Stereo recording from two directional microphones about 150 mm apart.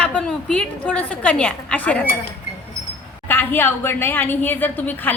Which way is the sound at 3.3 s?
15° left (ahead or behind).